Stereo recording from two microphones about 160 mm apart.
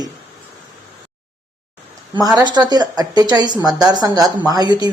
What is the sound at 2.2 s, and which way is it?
A woman's voice, 25° right (ahead or behind).